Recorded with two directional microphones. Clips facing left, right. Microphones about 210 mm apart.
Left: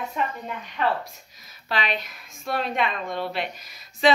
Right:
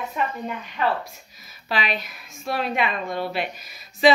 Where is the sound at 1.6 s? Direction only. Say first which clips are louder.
Right 1 dB; 5° right (ahead or behind).